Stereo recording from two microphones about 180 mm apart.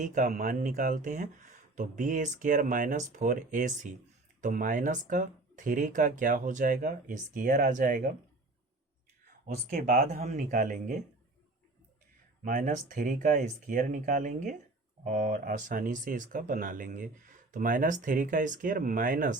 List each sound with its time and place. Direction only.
0.0 s speech: 45° right (ahead or behind)
9.5 s speech: 50° right (ahead or behind)
12.5 s speech: 50° right (ahead or behind)